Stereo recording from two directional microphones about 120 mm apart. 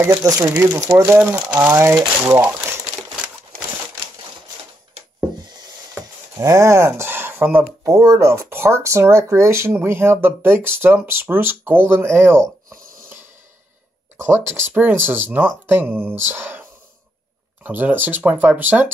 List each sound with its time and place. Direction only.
0.0 s speech: 25° right (ahead or behind)
6.3 s speech: 30° right (ahead or behind)
17.6 s speech: 15° right (ahead or behind)